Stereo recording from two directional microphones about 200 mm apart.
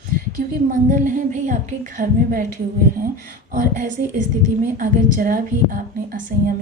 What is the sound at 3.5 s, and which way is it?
A woman's voice, 40° right (ahead or behind).